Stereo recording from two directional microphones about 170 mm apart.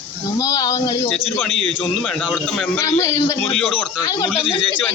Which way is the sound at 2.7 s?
15° left (ahead or behind).